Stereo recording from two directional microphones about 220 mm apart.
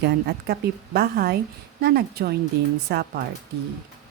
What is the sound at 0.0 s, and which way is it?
A woman's voice, 45° right (ahead or behind).